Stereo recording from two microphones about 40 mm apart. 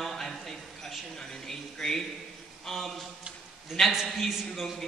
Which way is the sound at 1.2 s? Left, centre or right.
Centre.